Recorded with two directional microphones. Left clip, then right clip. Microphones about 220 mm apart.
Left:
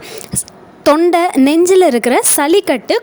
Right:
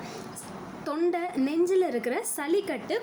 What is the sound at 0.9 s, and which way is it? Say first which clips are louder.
A woman's voice: left 18 dB; 45° left (ahead or behind).